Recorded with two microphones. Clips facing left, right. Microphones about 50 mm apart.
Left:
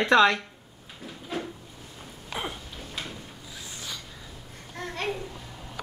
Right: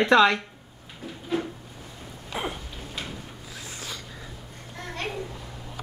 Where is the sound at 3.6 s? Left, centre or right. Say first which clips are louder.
Right 2 dB; right.